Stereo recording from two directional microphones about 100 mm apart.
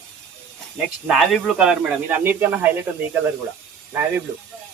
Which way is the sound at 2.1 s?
20° right (ahead or behind).